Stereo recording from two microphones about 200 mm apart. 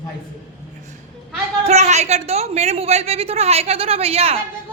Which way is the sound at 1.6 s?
35° right (ahead or behind).